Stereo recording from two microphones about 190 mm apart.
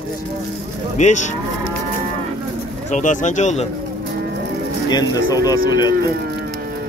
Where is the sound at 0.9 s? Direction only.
40° left (ahead or behind).